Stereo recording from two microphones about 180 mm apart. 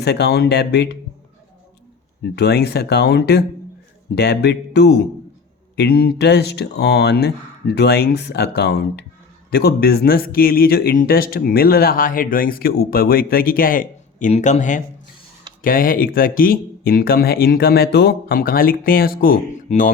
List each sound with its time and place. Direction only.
0.0 s speech: 65° left (ahead or behind)
2.2 s speech: 65° left (ahead or behind); by 19.9 s 50° left (ahead or behind)